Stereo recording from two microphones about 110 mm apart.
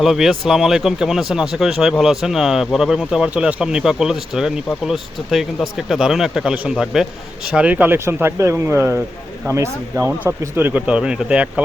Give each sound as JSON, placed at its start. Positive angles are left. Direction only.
{"t": 0.0, "sound": "speech", "side_deg": 0}